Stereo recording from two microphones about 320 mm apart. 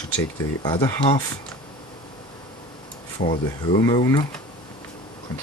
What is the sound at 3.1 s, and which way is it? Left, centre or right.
Speech, centre.